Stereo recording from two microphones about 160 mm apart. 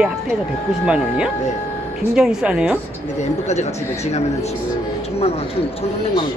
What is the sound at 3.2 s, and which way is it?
Speech, 45° left (ahead or behind).